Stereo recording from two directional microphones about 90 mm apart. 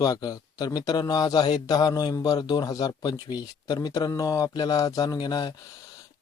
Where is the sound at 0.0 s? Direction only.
45° left (ahead or behind).